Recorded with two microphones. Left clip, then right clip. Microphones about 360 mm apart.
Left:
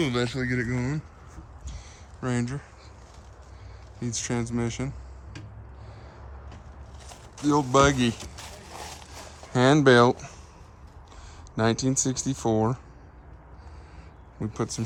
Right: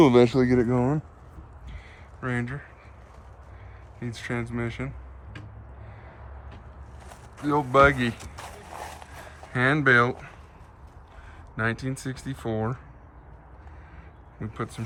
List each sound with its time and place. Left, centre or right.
0.0 s speech: centre
2.2 s speech: centre
4.0 s speech: centre
7.4 s speech: centre
11.5 s speech: centre
14.3 s speech: centre